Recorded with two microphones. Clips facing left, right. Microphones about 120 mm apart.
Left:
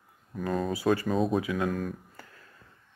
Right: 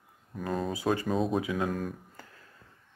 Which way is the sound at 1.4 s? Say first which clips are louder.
Left 1 dB; 25° right (ahead or behind).